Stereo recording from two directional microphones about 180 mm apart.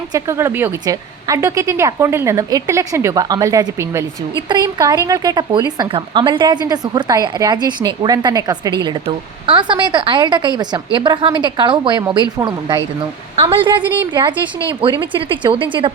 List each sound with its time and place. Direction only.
0.1 s a woman's voice: 15° right (ahead or behind)
14.1 s a woman's voice: 25° right (ahead or behind)